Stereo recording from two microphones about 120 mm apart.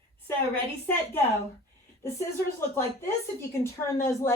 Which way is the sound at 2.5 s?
20° left (ahead or behind).